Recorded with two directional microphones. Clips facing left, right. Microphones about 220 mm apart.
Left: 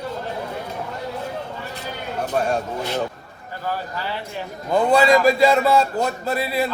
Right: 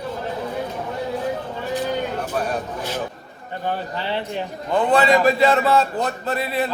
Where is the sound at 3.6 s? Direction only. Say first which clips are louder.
Right 2 dB; 25° right (ahead or behind).